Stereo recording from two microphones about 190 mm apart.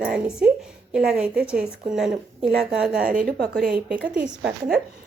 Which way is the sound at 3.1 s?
50° right (ahead or behind).